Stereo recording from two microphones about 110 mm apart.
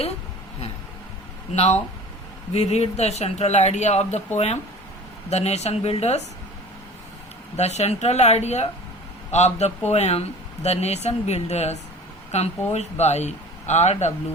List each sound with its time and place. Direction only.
1.5 s speech: 70° left (ahead or behind)
2.5 s speech: 85° left
7.5 s speech: 85° left